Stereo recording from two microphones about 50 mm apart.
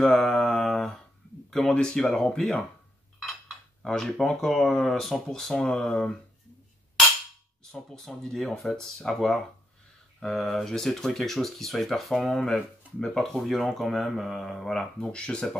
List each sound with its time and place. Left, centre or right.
0.0 s mantra: centre
1.7 s speech: centre
3.8 s speech: centre
5.3 s speech: centre
7.6 s speech: centre
12.4 s speech: centre
14.8 s speech: centre